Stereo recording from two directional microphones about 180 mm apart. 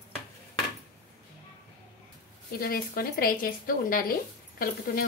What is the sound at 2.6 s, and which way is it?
Speech, 55° left (ahead or behind).